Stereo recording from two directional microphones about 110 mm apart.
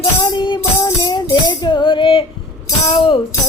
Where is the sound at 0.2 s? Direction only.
45° left (ahead or behind).